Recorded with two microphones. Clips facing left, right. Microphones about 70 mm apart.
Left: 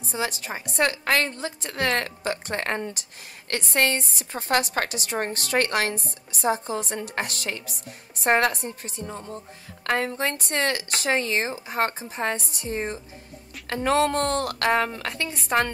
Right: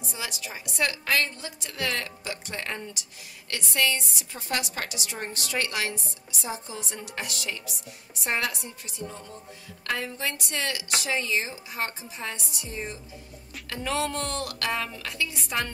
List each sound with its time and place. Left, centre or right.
0.1 s a woman's voice: left